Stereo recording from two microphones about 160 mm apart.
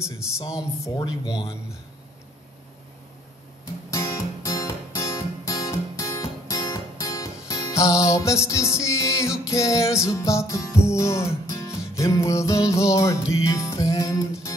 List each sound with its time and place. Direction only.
0.9 s music: 25° left (ahead or behind)
3.9 s music: 20° left (ahead or behind)